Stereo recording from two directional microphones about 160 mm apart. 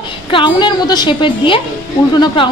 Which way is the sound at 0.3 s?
30° left (ahead or behind).